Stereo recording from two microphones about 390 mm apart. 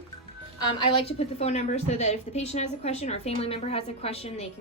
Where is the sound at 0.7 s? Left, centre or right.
Centre.